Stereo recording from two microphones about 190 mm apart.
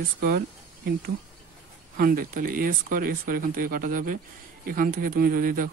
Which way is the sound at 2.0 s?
50° right (ahead or behind).